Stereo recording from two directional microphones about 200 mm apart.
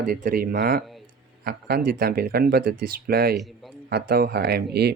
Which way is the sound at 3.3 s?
Centre (ahead or behind).